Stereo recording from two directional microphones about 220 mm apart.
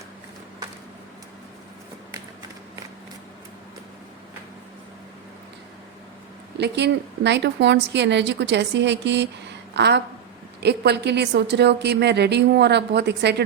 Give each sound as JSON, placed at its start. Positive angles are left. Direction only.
{"t": 6.6, "sound": "a woman's voice", "side_deg": -50}